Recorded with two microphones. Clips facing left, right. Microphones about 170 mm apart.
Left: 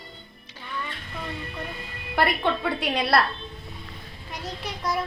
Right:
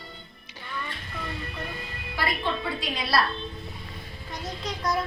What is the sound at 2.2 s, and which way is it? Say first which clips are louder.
A woman's voice: left 5 dB; 60° left (ahead or behind).